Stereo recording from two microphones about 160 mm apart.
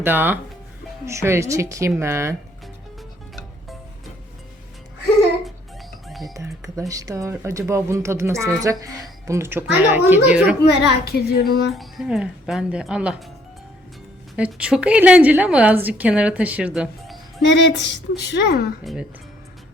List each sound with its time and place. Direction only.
0.0 s a woman's voice: 10° right (ahead or behind)
6.1 s music: centre (ahead or behind)
6.3 s speech: 20° right (ahead or behind)
10.8 s child singing: 85° left
11.7 s speech: centre (ahead or behind)
14.3 s a woman's voice: 5° right (ahead or behind)
17.4 s a woman's voice: 90° left